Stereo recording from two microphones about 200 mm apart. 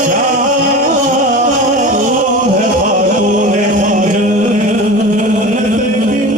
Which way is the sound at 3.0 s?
40° right (ahead or behind).